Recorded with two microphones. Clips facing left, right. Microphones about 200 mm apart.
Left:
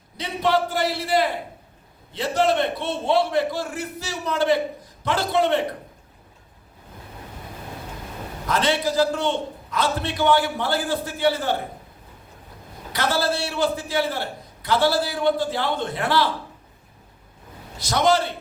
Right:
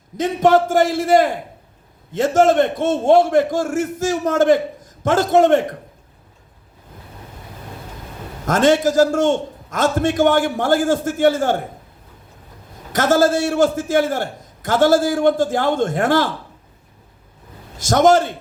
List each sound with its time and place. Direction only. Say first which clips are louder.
0.2 s a man's voice: right 8 dB; 45° right (ahead or behind)
8.4 s a man's voice: right 8 dB; 45° right (ahead or behind)
12.9 s a man's voice: right 8 dB; 45° right (ahead or behind)
17.7 s a man's voice: right 7 dB; 45° right (ahead or behind)